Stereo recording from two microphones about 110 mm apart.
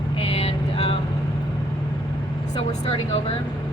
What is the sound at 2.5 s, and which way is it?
Speech, 75° left (ahead or behind).